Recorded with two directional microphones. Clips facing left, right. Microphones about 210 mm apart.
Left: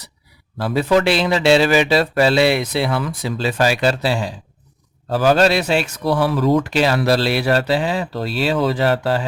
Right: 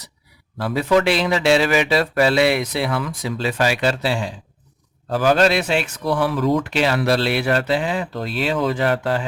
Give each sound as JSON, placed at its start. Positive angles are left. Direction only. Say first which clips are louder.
{"t": 0.6, "sound": "speech", "louder": "left 1 dB", "side_deg": 30}